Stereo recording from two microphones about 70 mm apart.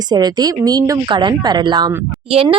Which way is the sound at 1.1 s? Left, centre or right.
Right.